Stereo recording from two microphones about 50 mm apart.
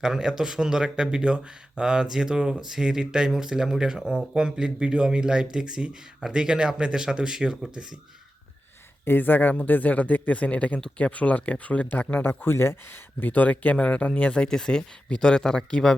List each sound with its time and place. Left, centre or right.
0.0 s speech: centre
9.0 s speech: left
12.2 s speech: left
13.1 s speech: left; by 16.0 s centre